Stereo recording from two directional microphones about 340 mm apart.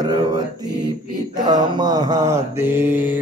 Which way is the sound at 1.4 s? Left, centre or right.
Centre.